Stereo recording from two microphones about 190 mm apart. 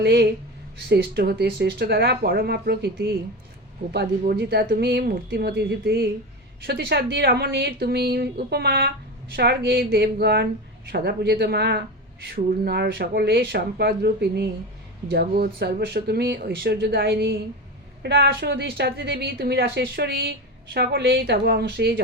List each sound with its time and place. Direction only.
0.0 s a woman's voice: 60° right (ahead or behind)